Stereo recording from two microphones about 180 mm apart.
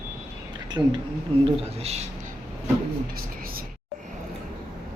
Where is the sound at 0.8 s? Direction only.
25° right (ahead or behind).